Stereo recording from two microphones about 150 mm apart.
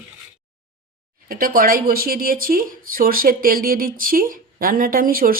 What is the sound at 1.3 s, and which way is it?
Speech, 75° right (ahead or behind).